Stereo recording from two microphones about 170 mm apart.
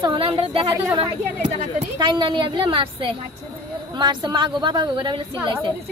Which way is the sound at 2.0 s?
30° right (ahead or behind).